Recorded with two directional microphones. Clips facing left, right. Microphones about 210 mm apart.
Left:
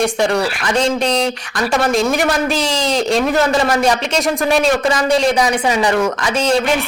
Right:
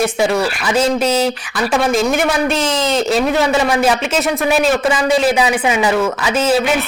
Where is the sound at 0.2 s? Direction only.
5° right (ahead or behind).